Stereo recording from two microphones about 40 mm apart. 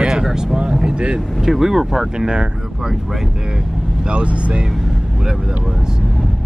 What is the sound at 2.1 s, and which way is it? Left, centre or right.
Speech, right.